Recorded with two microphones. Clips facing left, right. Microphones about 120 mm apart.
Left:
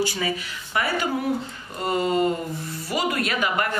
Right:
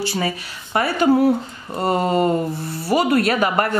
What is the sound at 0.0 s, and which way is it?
Speech, 30° right (ahead or behind).